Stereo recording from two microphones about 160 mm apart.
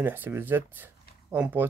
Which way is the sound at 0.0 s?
10° right (ahead or behind).